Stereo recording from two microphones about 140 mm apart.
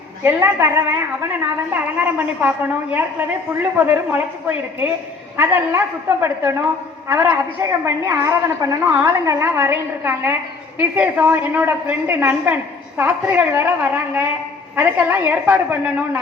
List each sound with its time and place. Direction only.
0.2 s a woman's voice: 15° right (ahead or behind)